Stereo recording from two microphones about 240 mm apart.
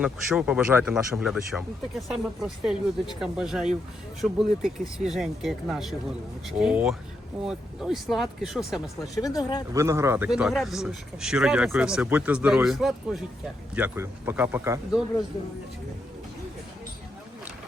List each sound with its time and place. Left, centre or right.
0.0 s speech: centre
9.1 s speech: centre
9.7 s speech: centre